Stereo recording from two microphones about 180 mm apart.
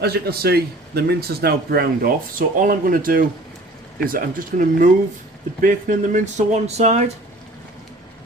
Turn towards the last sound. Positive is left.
turn(degrees=-40)  # may be behind; listen again after turning